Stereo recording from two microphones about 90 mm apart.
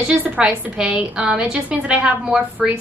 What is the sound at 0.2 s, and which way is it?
A woman's voice, 10° right (ahead or behind).